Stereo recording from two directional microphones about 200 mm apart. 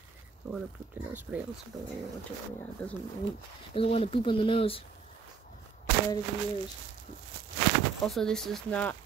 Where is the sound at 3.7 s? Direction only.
30° left (ahead or behind).